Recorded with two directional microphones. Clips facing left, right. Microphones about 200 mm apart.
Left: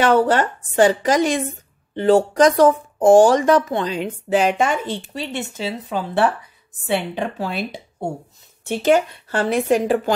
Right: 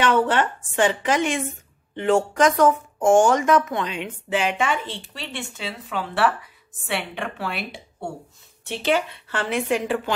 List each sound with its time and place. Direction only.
0.0 s speech: 40° left (ahead or behind)
8.6 s speech: 45° left (ahead or behind)